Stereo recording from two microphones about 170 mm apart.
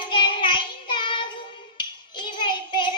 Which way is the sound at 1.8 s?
25° left (ahead or behind).